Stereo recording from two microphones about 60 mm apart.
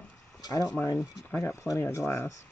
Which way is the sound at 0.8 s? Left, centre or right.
Left.